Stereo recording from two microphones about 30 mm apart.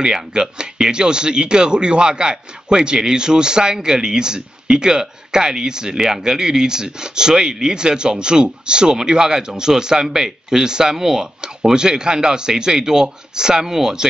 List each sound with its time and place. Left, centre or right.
0.0 s speech: right